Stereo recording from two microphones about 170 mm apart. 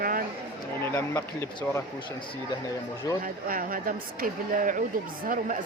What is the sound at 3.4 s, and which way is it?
A woman's voice, 55° right (ahead or behind).